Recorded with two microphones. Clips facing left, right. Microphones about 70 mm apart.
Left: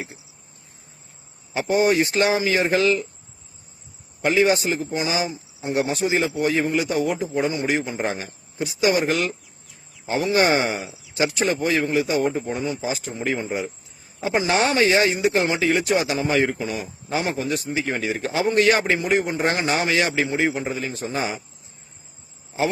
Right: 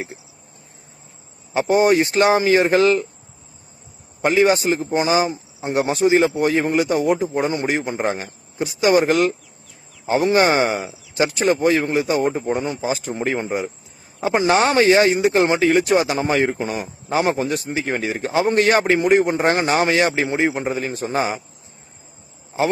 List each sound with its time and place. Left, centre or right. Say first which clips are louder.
1.5 s speech: right 4 dB; right
4.2 s speech: right 3 dB; right
10.8 s speech: right 3 dB; right
12.6 s speech: right 3 dB; right